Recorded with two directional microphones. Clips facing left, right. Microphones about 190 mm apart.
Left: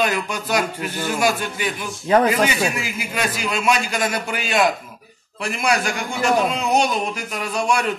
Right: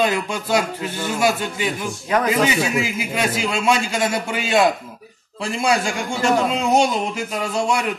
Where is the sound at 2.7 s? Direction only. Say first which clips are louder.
Right 4 dB; 25° right (ahead or behind).